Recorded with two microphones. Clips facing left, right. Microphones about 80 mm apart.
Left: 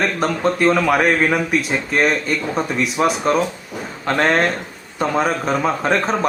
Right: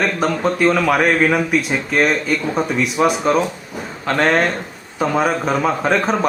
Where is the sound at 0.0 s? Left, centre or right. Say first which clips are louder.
Right 1 dB; centre.